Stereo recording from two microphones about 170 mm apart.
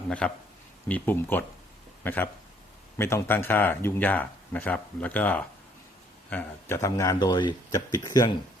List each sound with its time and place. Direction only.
0.1 s speech: 5° left (ahead or behind); by 8.4 s 20° left (ahead or behind)